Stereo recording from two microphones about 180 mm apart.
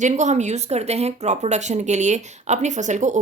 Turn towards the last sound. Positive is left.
turn(degrees=-40)  # may be behind; listen again after turning